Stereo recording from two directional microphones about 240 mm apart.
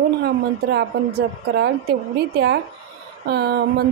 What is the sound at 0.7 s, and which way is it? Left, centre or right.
Speech, right.